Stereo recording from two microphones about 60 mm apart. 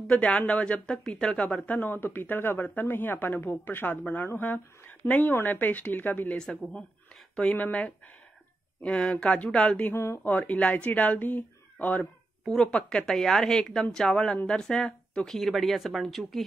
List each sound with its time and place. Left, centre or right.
0.1 s speech: centre
1.7 s speech: left
6.3 s speech: centre
7.5 s speech: left
9.9 s speech: left
10.2 s speech: left
12.0 s speech: centre